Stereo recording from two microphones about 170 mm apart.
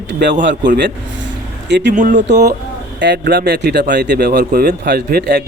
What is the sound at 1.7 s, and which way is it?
Speech, 90° right.